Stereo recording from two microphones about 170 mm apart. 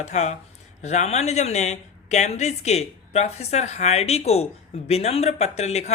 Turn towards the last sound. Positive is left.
turn(degrees=40)  # may be behind; listen again after turning